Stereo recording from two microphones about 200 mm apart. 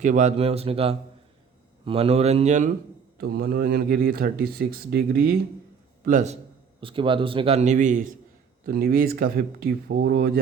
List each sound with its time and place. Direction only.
0.0 s a man's voice: 35° right (ahead or behind)
3.2 s speech: 50° right (ahead or behind)
6.1 s a man's voice: 35° right (ahead or behind); by 10.4 s 55° right (ahead or behind)